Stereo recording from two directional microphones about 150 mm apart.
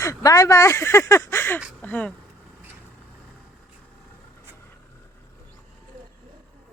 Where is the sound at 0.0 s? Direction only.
20° left (ahead or behind).